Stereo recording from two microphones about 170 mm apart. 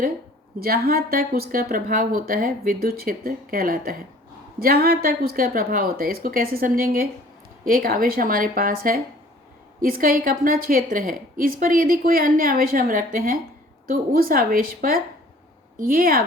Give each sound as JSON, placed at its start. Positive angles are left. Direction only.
{"t": 0.6, "sound": "a woman's voice", "side_deg": -60}